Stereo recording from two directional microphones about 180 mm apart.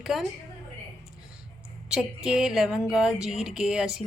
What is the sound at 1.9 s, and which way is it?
Speech, 5° right (ahead or behind).